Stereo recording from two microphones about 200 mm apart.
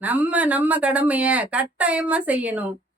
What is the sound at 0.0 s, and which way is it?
A woman's voice, 10° right (ahead or behind).